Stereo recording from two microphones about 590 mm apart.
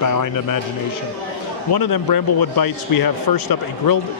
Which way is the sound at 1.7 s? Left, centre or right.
Left.